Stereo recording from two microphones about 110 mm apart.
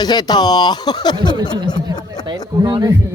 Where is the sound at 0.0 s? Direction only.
40° left (ahead or behind).